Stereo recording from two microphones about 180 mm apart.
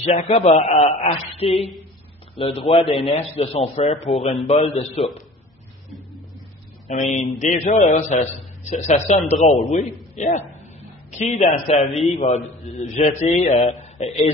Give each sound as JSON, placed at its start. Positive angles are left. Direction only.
{"t": 0.0, "sound": "a man's voice", "side_deg": 35}
{"t": 6.9, "sound": "a man's voice", "side_deg": 40}
{"t": 9.4, "sound": "a man's voice", "side_deg": 0}
{"t": 9.7, "sound": "a man's voice", "side_deg": 40}